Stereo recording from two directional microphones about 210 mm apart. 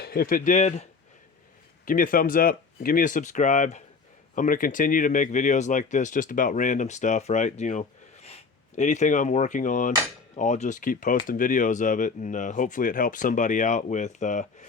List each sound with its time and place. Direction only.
0.0 s speech: 45° left (ahead or behind)